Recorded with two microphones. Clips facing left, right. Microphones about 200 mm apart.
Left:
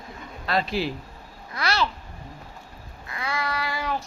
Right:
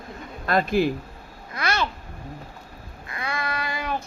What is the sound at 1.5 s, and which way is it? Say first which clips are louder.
Babbling: even; 20° right (ahead or behind).